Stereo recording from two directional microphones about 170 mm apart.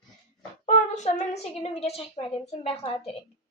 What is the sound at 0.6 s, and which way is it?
A child's voice, 45° left (ahead or behind).